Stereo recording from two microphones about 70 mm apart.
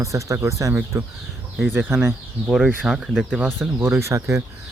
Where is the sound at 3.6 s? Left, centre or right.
Right.